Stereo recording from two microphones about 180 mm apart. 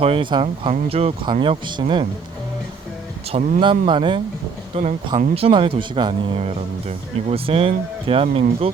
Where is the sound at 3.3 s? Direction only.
40° right (ahead or behind).